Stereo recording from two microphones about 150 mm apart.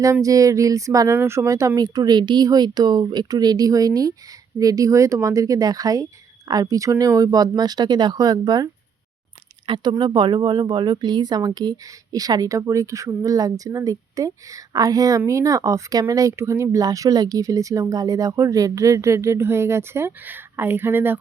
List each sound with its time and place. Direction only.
0.0 s speech: 20° right (ahead or behind)